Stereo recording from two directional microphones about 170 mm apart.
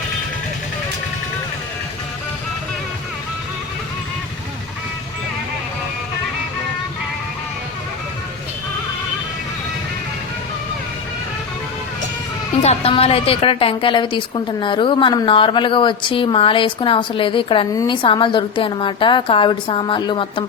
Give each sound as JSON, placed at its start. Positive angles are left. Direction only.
{"t": 12.6, "sound": "a woman's voice", "side_deg": 35}